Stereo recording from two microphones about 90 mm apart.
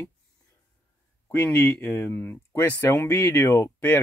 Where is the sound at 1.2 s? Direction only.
20° left (ahead or behind).